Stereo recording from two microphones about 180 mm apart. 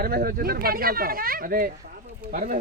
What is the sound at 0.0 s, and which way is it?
Speech, 55° right (ahead or behind).